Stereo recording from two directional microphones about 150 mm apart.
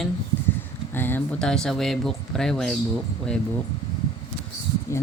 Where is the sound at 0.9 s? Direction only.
15° left (ahead or behind).